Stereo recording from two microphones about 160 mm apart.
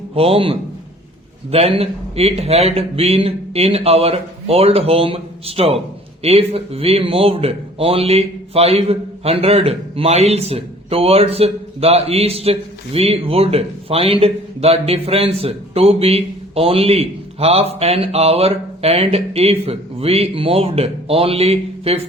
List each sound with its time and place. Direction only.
0.1 s a man's voice: 35° right (ahead or behind)